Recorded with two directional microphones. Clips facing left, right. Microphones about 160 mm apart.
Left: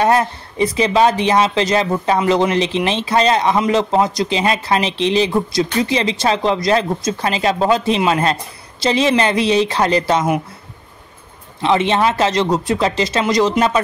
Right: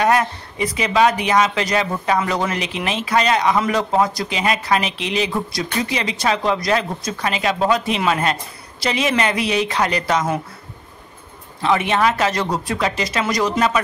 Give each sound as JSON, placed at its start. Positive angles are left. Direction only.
{"t": 0.0, "sound": "speech", "side_deg": 30}
{"t": 11.6, "sound": "speech", "side_deg": 25}